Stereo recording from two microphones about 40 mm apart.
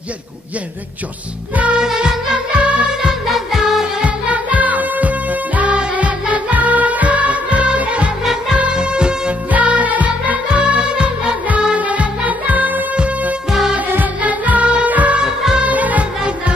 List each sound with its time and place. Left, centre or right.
1.8 s music: centre
2.5 s music: right
3.3 s music: centre
4.0 s music: right
9.5 s music: right
10.6 s music: right
12.9 s music: right
13.5 s music: centre
14.2 s music: right
15.1 s music: centre
15.6 s music: right